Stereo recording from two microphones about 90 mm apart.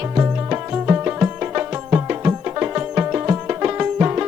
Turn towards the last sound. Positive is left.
turn(degrees=-20)  # may be behind; listen again after turning